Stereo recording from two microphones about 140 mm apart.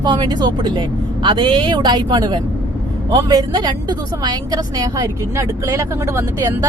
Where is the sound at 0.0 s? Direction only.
30° right (ahead or behind).